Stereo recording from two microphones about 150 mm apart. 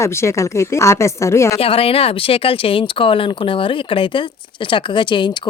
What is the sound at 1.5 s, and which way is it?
Speech, 40° left (ahead or behind).